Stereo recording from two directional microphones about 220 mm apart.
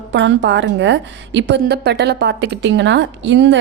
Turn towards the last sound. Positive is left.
turn(degrees=-55)  # may be behind; listen again after turning